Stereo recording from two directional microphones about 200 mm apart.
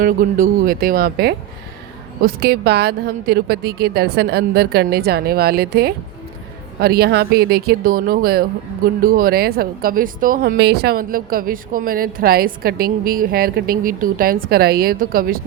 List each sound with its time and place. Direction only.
0.0 s speech: 45° right (ahead or behind)